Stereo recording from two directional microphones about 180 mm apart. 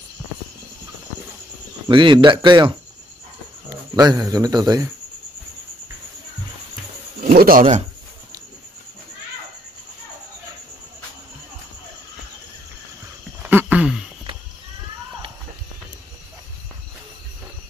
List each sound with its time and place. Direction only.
1.9 s speech: 25° right (ahead or behind)
3.9 s speech: 20° right (ahead or behind)
7.2 s speech: 50° right (ahead or behind)
13.4 s a sound: 10° right (ahead or behind)